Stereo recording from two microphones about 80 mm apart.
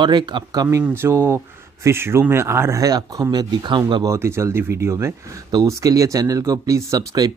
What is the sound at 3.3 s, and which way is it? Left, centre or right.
Speech, right.